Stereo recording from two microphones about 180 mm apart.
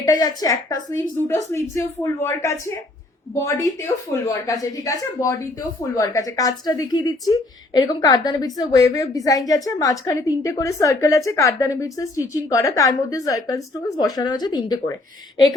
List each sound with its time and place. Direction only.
0.0 s a woman's voice: 20° left (ahead or behind)